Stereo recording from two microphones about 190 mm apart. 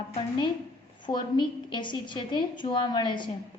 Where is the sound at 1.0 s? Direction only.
25° left (ahead or behind).